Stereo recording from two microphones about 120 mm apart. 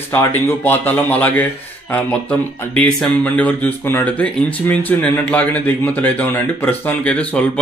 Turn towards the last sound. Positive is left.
turn(degrees=10)  # may be behind; listen again after turning